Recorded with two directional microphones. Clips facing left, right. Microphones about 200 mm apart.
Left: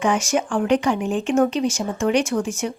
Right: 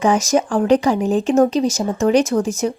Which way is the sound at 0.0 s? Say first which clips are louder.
Right 4 dB; 40° right (ahead or behind).